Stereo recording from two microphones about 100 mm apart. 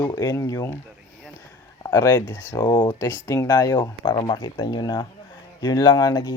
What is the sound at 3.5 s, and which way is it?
Speech, 45° left (ahead or behind).